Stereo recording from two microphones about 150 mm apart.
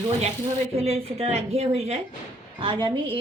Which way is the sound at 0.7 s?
45° right (ahead or behind).